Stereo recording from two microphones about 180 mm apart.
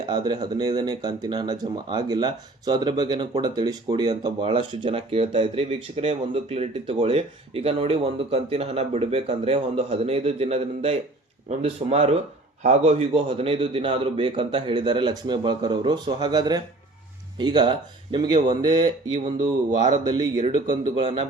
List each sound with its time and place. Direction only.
0.0 s a man's voice: 25° right (ahead or behind)
20.1 s a man's voice: 25° right (ahead or behind)